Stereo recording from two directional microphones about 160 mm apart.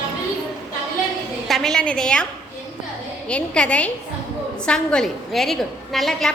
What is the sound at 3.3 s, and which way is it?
A woman's voice, 5° left (ahead or behind).